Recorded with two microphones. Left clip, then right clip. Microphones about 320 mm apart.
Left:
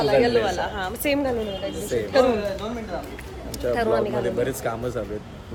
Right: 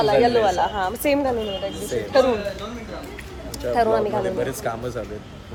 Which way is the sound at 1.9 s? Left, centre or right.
Centre.